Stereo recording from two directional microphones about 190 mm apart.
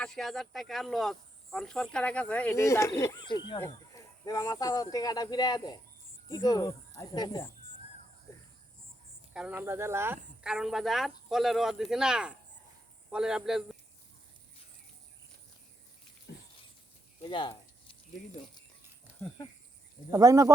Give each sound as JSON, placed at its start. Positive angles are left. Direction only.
{"t": 0.0, "sound": "speech", "side_deg": 0}
{"t": 9.3, "sound": "speech", "side_deg": -5}
{"t": 10.4, "sound": "speech", "side_deg": -5}
{"t": 16.3, "sound": "a sound", "side_deg": 65}
{"t": 17.2, "sound": "a sound", "side_deg": 25}
{"t": 20.1, "sound": "speech", "side_deg": -20}